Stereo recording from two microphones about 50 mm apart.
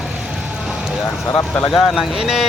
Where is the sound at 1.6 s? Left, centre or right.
Centre.